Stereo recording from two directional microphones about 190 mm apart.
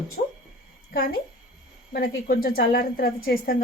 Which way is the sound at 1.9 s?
55° left (ahead or behind).